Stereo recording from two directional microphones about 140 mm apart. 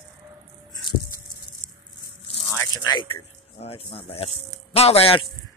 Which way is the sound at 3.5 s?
45° left (ahead or behind).